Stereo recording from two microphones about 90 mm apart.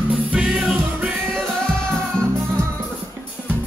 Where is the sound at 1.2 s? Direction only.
10° left (ahead or behind).